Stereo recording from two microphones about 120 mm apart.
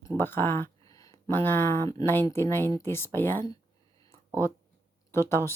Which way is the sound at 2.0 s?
20° left (ahead or behind).